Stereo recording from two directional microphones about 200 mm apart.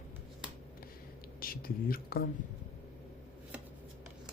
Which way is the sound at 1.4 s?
45° left (ahead or behind).